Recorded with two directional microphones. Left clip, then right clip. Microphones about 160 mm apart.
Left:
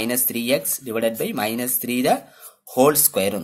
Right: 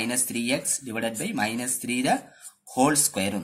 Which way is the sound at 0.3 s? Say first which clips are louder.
Left 5 dB; 50° left (ahead or behind).